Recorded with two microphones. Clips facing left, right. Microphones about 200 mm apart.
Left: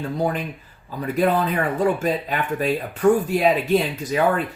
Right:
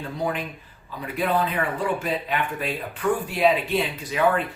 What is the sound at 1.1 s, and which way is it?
Speech, 45° left (ahead or behind).